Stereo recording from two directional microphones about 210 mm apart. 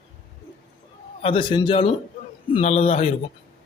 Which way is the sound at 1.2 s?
25° left (ahead or behind).